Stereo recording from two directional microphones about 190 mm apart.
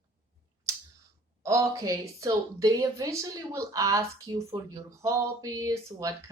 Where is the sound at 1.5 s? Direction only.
15° right (ahead or behind).